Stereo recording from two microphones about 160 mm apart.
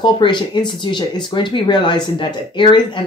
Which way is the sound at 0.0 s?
30° left (ahead or behind).